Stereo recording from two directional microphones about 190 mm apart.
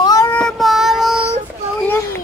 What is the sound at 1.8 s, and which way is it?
Speech, 15° left (ahead or behind).